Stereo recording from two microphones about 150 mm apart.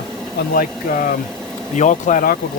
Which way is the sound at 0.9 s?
65° left (ahead or behind).